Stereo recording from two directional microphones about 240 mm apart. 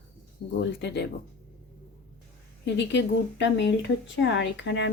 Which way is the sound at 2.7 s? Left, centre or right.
Left.